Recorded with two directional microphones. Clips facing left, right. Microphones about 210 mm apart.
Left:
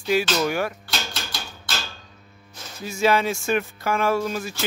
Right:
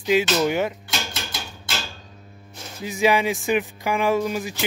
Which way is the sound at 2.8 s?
15° right (ahead or behind).